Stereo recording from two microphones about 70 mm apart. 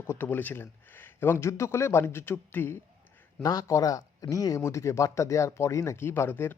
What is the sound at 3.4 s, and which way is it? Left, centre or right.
Speech, left.